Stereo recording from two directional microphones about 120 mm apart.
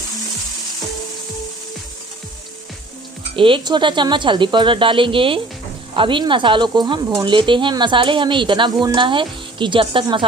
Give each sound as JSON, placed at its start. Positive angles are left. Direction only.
{"t": 3.3, "sound": "speech", "side_deg": -45}